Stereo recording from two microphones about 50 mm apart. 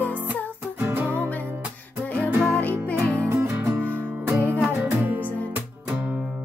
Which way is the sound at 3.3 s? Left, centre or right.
Right.